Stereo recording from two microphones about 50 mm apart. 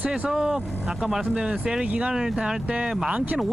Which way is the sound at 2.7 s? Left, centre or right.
Right.